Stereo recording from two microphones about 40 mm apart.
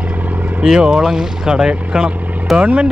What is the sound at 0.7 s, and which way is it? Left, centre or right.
Speech, right.